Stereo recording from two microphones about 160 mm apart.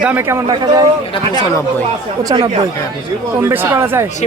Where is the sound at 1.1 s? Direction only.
25° left (ahead or behind).